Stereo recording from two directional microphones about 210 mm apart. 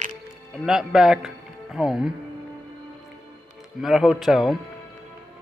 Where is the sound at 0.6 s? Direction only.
Centre (ahead or behind).